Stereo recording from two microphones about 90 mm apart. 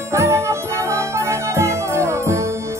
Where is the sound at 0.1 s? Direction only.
30° right (ahead or behind).